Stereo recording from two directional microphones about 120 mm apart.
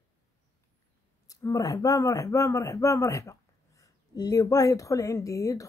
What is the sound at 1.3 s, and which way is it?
A woman's voice, 30° left (ahead or behind).